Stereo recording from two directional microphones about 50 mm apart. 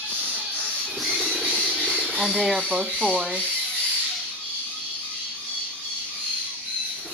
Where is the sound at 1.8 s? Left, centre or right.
Centre.